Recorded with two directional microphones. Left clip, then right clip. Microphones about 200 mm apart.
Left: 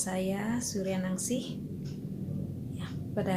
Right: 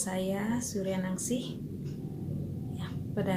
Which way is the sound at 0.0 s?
15° left (ahead or behind).